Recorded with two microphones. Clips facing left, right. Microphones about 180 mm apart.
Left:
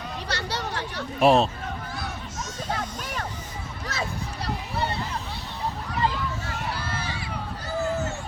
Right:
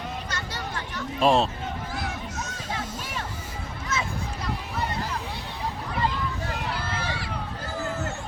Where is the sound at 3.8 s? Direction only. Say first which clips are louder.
Right 1 dB; 35° left (ahead or behind).